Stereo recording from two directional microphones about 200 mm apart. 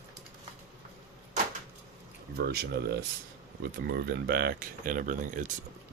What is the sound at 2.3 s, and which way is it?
Speech, 50° right (ahead or behind).